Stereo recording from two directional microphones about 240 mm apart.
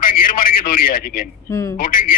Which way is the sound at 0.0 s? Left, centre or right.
Left.